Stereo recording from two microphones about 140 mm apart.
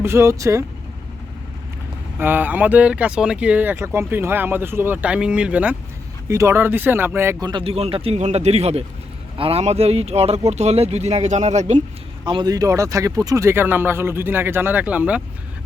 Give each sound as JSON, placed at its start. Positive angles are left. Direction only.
{"t": 0.0, "sound": "speech", "side_deg": -20}
{"t": 2.1, "sound": "speech", "side_deg": -15}
{"t": 6.2, "sound": "speech", "side_deg": -20}
{"t": 7.4, "sound": "speech", "side_deg": -40}
{"t": 12.2, "sound": "speech", "side_deg": -35}